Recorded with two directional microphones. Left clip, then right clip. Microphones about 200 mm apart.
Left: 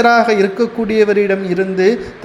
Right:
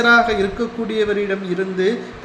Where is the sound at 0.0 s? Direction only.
35° left (ahead or behind).